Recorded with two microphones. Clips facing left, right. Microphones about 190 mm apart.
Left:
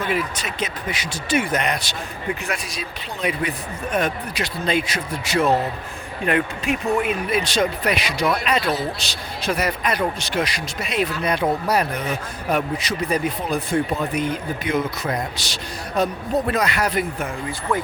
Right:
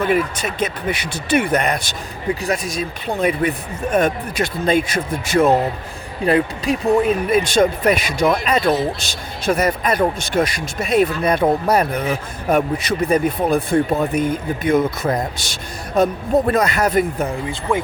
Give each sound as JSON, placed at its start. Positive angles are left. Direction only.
{"t": 0.1, "sound": "speech", "side_deg": -50}
{"t": 6.2, "sound": "speech", "side_deg": -35}
{"t": 17.7, "sound": "speech", "side_deg": -10}